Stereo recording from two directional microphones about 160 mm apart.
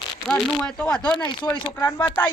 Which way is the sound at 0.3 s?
5° left (ahead or behind).